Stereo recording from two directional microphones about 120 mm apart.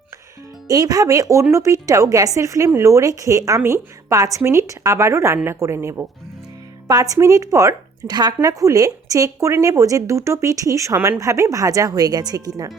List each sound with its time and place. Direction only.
0.7 s speech: 30° right (ahead or behind)